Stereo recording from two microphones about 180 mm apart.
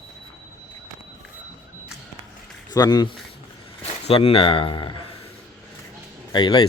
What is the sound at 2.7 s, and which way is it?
Speech, 20° left (ahead or behind).